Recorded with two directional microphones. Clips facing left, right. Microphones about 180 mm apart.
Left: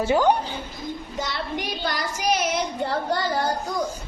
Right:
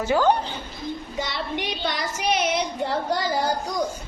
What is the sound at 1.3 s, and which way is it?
Speech, centre (ahead or behind).